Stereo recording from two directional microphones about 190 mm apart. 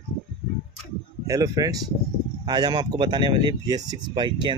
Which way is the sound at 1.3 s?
20° right (ahead or behind).